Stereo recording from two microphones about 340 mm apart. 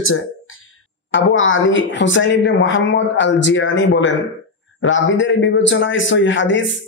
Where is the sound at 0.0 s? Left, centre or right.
Left.